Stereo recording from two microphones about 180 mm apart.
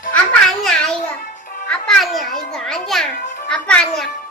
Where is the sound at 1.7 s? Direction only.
5° left (ahead or behind).